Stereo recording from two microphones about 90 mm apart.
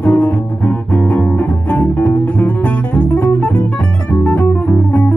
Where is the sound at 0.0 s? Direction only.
15° left (ahead or behind).